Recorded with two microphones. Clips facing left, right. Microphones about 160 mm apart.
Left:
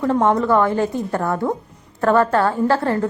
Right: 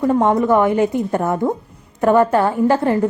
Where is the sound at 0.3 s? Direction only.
20° right (ahead or behind).